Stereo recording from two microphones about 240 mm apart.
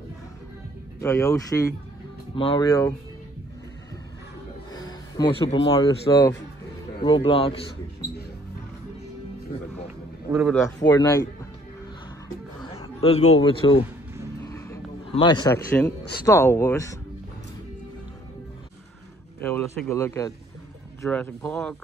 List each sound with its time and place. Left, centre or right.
1.0 s speech: centre
4.7 s a man's voice: centre
10.3 s speech: centre
10.8 s speech: centre
12.6 s a sound: left
13.4 s a man's voice: left
14.4 s a sound: centre
16.1 s speech: centre
19.4 s speech: centre